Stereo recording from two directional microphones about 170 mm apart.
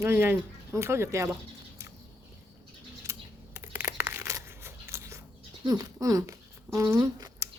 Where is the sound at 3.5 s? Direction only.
15° right (ahead or behind).